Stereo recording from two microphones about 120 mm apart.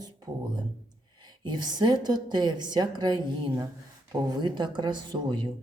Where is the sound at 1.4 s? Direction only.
35° right (ahead or behind).